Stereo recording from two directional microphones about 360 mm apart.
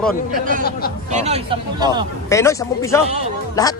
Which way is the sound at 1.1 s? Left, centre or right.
Centre.